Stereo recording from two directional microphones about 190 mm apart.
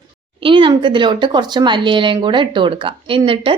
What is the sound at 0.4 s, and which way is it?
A woman's voice, 25° right (ahead or behind).